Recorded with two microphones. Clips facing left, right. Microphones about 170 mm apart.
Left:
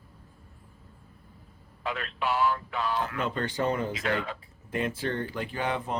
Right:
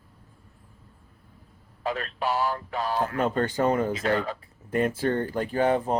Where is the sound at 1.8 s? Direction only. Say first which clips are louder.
Right 3 dB; 40° right (ahead or behind).